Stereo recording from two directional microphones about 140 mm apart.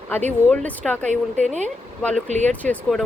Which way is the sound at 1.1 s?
60° right (ahead or behind).